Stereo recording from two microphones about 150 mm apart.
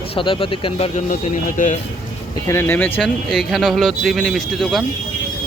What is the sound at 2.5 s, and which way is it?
Speech, 15° left (ahead or behind).